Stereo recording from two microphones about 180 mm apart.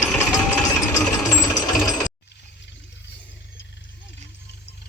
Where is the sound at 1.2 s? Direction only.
20° left (ahead or behind).